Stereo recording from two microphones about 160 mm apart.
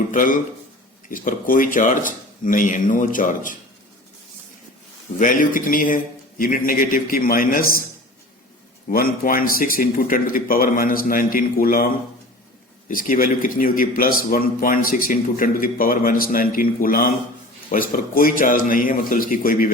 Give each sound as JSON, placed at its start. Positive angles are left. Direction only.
{"t": 0.1, "sound": "a man's voice", "side_deg": 55}
{"t": 5.2, "sound": "a man's voice", "side_deg": 55}
{"t": 8.9, "sound": "a man's voice", "side_deg": 65}
{"t": 12.9, "sound": "a man's voice", "side_deg": 60}